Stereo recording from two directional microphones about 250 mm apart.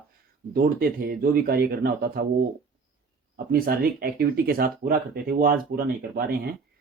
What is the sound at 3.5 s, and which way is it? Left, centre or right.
Speech, right.